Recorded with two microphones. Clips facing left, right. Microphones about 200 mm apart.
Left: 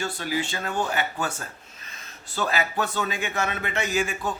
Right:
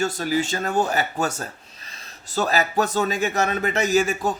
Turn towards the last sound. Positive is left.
turn(degrees=-40)  # may be behind; listen again after turning